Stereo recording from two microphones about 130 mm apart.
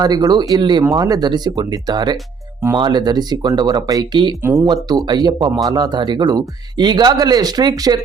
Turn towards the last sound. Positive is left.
turn(degrees=-30)  # may be behind; listen again after turning